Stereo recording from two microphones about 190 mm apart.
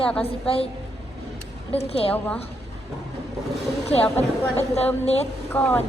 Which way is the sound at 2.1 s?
10° left (ahead or behind).